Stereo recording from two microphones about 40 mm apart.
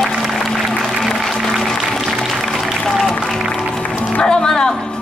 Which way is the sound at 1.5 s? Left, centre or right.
Centre.